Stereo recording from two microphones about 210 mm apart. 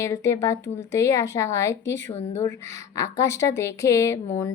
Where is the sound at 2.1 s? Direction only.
30° left (ahead or behind).